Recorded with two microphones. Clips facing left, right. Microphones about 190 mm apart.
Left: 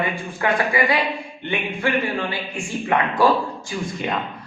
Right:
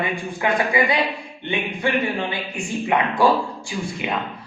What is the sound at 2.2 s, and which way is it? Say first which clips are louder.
Speech: even; 20° right (ahead or behind).